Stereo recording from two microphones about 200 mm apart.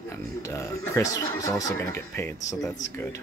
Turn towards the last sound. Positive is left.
turn(degrees=15)  # may be behind; listen again after turning